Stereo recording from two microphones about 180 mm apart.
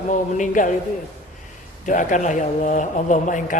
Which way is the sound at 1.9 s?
45° left (ahead or behind).